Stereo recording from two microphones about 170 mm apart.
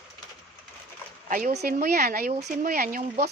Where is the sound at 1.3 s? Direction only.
55° right (ahead or behind).